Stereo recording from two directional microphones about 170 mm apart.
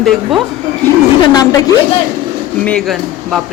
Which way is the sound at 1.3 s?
20° left (ahead or behind).